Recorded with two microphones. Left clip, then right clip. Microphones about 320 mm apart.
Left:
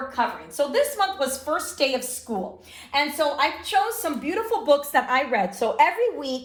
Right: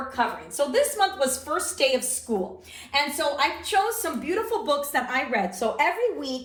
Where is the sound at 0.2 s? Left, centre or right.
Centre.